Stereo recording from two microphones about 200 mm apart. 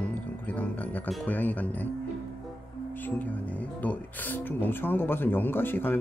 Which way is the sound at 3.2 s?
10° left (ahead or behind).